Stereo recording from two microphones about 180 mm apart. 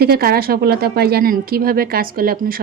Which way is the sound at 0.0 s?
60° right (ahead or behind).